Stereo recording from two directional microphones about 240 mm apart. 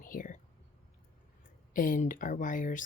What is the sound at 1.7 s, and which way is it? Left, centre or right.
Speech, left.